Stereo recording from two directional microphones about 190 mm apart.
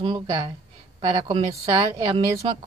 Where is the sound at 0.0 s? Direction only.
25° right (ahead or behind).